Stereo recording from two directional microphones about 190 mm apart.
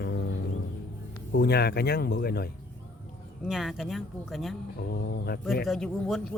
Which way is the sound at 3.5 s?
Centre (ahead or behind).